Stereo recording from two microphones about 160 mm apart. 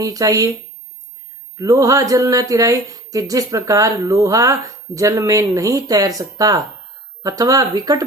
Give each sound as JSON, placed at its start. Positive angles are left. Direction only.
{"t": 0.0, "sound": "speech", "side_deg": -20}
{"t": 1.5, "sound": "speech", "side_deg": -20}